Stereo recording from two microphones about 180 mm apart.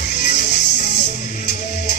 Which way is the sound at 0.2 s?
45° left (ahead or behind).